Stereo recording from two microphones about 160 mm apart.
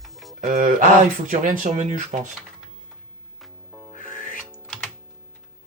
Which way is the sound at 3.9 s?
55° left (ahead or behind).